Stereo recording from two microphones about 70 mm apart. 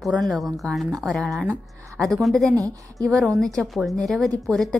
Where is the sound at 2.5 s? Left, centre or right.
Right.